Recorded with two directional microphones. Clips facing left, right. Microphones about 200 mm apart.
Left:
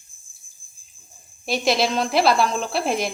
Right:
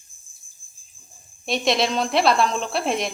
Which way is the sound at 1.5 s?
5° left (ahead or behind).